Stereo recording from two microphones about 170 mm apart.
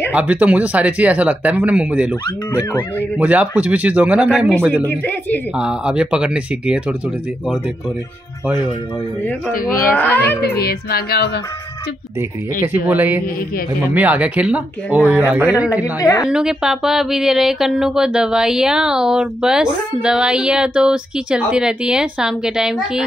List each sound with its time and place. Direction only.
0.1 s speech: 10° right (ahead or behind)
2.5 s speech: 10° left (ahead or behind)
3.2 s speech: 10° right (ahead or behind)
4.8 s speech: 10° left (ahead or behind)
5.6 s speech: 5° right (ahead or behind)
9.8 s speech: 10° left (ahead or behind)
10.4 s speech: 65° left (ahead or behind)
12.8 s speech: 10° right (ahead or behind)
15.8 s a woman's voice: 20° left (ahead or behind)
16.3 s speech: 5° right (ahead or behind)